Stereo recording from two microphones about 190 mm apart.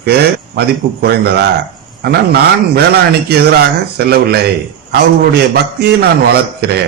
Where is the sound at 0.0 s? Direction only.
55° right (ahead or behind).